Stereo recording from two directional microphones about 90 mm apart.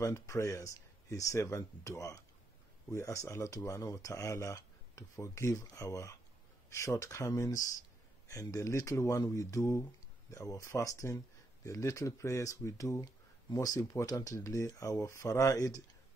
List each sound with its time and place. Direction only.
0.0 s speech: 35° left (ahead or behind)